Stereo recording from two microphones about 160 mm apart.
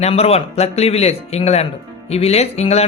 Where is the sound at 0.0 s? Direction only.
40° left (ahead or behind).